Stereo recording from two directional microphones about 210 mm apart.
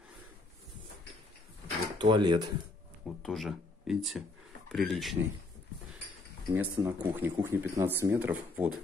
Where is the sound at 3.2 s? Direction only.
Centre (ahead or behind).